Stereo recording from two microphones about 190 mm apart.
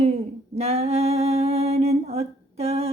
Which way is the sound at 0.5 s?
35° right (ahead or behind).